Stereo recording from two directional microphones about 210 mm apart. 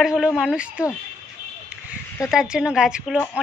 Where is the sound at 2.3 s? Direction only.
5° right (ahead or behind).